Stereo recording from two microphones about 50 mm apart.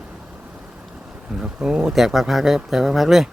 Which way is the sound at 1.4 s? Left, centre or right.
Centre.